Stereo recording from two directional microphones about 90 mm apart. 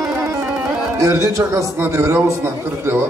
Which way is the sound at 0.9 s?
40° right (ahead or behind).